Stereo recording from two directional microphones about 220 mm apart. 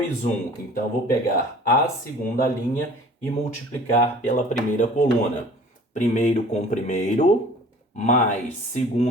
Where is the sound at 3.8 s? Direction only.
35° left (ahead or behind).